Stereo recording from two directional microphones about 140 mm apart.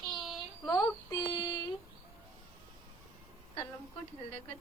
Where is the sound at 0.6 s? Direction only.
30° left (ahead or behind).